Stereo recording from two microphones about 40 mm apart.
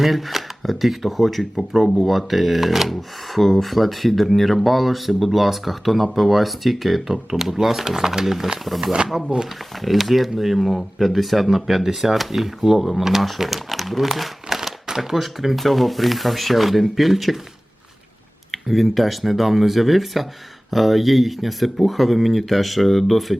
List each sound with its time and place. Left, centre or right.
0.0 s speech: centre
8.8 s speech: centre
9.8 s speech: centre
18.5 s speech: centre